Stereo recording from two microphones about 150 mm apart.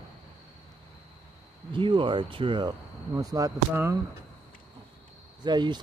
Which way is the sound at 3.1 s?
25° right (ahead or behind).